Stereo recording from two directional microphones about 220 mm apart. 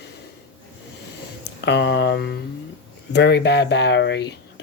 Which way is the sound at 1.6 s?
50° left (ahead or behind).